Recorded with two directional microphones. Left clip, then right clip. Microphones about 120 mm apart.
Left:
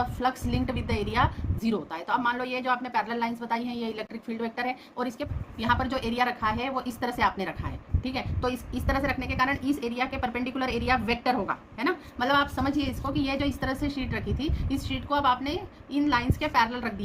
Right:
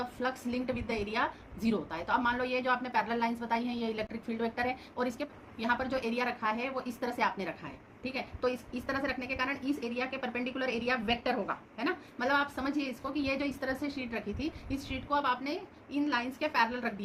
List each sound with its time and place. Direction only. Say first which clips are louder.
0.0 s a woman's voice: left 7 dB; 40° left (ahead or behind)